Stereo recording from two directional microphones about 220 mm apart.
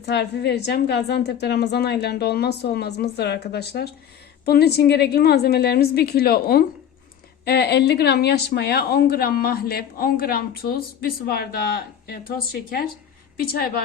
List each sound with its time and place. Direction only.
0.0 s a woman's voice: 50° left (ahead or behind)